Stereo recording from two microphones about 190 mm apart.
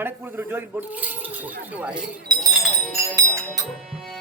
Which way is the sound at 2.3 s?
20° right (ahead or behind).